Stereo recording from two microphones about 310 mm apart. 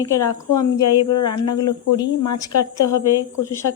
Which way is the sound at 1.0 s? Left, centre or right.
Left.